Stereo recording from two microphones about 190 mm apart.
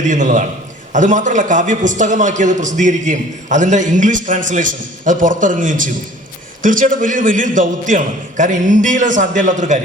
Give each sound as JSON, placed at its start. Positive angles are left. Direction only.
{"t": 0.0, "sound": "a man's voice", "side_deg": -40}